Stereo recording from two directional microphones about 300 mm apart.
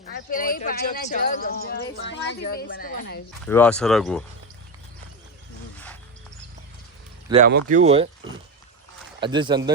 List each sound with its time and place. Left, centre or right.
0.0 s speech: left
3.4 s speech: centre
7.4 s speech: right
9.2 s speech: centre